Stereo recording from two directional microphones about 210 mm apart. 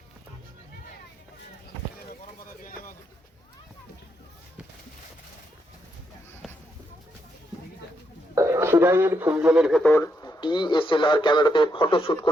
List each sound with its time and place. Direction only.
8.4 s speech: 15° right (ahead or behind)
9.8 s speech: 10° left (ahead or behind)